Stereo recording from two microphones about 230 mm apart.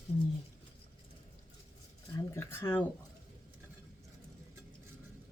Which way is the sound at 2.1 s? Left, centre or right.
Centre.